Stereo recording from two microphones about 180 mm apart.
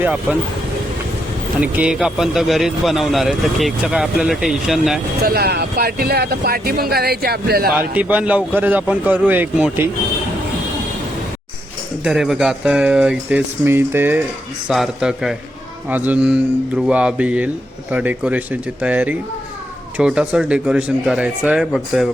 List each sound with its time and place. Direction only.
0.0 s speech: 10° right (ahead or behind)
1.6 s speech: 5° right (ahead or behind)
5.2 s speech: 60° right (ahead or behind)
7.7 s speech: 5° right (ahead or behind)
12.0 s speech: centre (ahead or behind)